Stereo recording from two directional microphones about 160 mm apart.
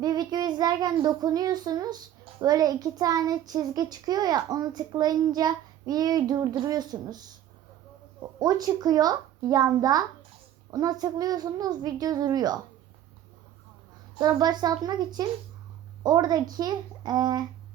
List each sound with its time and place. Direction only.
0.0 s child singing: 25° right (ahead or behind)
8.4 s child singing: 25° right (ahead or behind)
14.2 s child singing: 25° right (ahead or behind)